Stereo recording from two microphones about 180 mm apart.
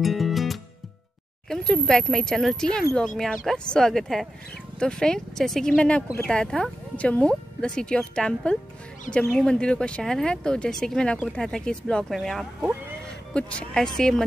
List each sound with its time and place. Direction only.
0.0 s music: centre (ahead or behind)
1.5 s speech: 5° left (ahead or behind)